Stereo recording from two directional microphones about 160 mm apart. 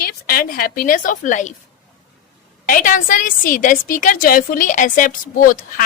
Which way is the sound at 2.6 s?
60° left (ahead or behind).